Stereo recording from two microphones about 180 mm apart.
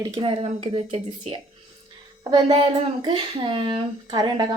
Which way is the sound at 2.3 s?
25° right (ahead or behind).